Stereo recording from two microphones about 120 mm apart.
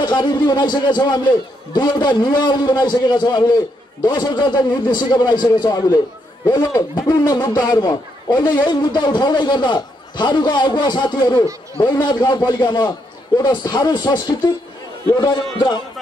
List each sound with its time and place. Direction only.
0.0 s a man's voice: 35° left (ahead or behind)